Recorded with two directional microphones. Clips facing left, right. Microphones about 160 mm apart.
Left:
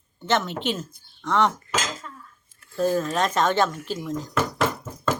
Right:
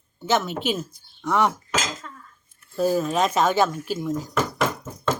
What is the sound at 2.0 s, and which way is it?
Dishes, 5° left (ahead or behind).